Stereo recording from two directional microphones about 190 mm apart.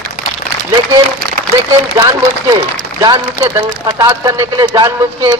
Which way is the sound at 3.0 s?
20° right (ahead or behind).